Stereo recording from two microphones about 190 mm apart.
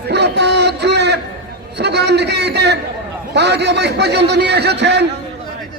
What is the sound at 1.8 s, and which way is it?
A man's voice, 60° right (ahead or behind).